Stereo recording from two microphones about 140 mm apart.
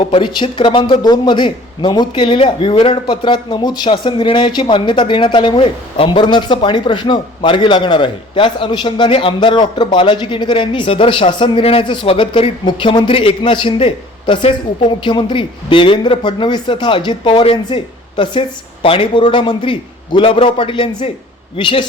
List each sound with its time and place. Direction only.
0.1 s a man's voice: 35° left (ahead or behind)